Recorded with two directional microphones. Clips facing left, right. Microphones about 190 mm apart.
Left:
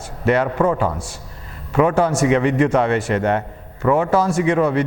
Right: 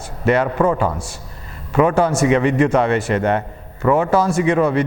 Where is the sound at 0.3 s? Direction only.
20° right (ahead or behind).